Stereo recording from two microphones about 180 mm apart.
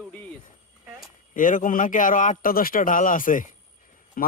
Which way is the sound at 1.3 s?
45° left (ahead or behind).